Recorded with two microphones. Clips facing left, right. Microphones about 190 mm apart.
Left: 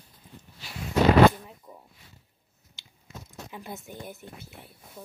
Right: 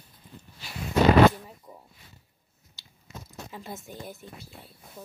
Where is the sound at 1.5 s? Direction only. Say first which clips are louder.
Even; 5° right (ahead or behind).